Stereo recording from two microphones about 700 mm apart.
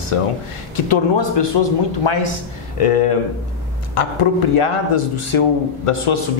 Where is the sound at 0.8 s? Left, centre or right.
Left.